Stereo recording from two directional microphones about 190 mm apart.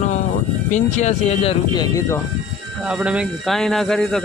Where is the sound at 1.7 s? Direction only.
20° left (ahead or behind).